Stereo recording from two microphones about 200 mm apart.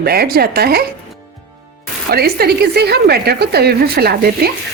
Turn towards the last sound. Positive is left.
turn(degrees=-50)  # may be behind; listen again after turning